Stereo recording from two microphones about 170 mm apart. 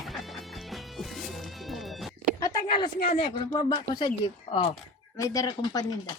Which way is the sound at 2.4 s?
25° left (ahead or behind).